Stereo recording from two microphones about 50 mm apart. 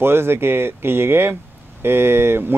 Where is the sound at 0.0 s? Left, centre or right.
Right.